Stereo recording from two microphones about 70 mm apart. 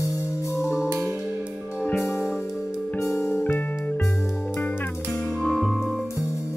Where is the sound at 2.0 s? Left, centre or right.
Left.